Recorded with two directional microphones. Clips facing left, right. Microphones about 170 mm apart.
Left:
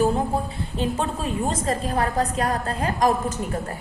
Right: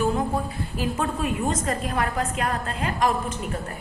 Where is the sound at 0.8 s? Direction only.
30° left (ahead or behind).